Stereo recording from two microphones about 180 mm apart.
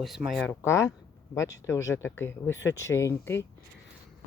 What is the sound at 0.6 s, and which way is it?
Speech, 15° left (ahead or behind).